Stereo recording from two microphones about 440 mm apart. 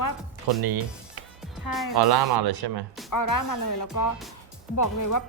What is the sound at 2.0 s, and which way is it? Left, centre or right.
Speech, right.